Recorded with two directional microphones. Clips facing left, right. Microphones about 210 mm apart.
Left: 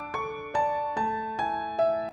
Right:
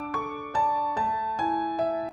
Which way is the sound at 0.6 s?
20° left (ahead or behind).